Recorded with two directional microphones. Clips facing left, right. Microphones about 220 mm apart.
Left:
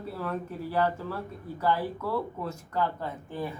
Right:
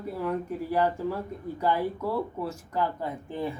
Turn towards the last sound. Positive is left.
turn(degrees=-15)  # may be behind; listen again after turning